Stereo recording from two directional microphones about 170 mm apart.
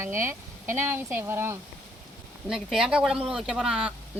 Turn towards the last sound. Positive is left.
turn(degrees=-5)  # may be behind; listen again after turning